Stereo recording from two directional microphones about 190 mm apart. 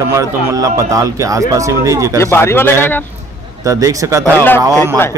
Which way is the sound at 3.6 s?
15° right (ahead or behind).